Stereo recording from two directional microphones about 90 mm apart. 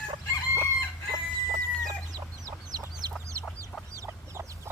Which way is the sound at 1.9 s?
40° right (ahead or behind).